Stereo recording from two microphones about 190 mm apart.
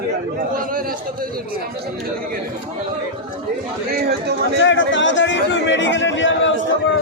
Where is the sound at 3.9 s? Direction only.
55° right (ahead or behind).